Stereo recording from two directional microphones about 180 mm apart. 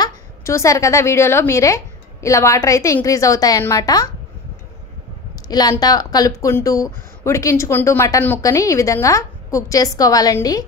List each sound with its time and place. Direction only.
0.0 s a woman's voice: 15° left (ahead or behind)
5.5 s speech: 20° left (ahead or behind)